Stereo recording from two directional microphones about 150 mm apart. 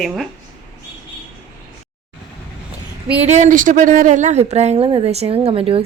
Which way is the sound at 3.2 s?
50° right (ahead or behind).